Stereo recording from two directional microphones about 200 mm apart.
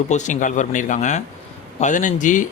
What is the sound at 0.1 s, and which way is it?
Speech, 35° left (ahead or behind).